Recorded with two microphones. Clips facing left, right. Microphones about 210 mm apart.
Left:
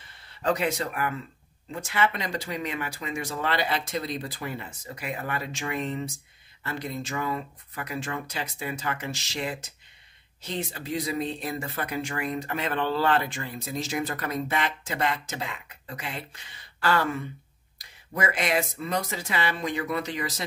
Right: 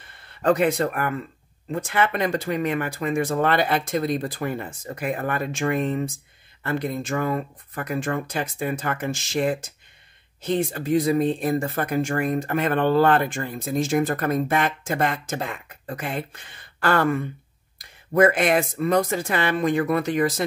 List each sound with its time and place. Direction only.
0.0 s speech: 55° right (ahead or behind)